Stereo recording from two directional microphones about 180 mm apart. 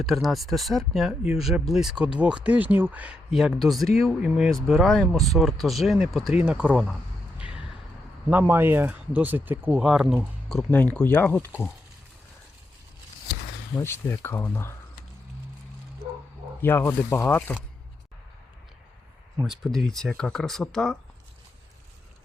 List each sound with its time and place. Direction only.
0.0 s speech: centre (ahead or behind)
7.3 s a sound: 5° right (ahead or behind)
8.3 s speech: 10° right (ahead or behind)
10.7 s speech: 10° left (ahead or behind)
13.7 s speech: 15° left (ahead or behind)
16.6 s speech: 10° left (ahead or behind)
19.4 s speech: centre (ahead or behind)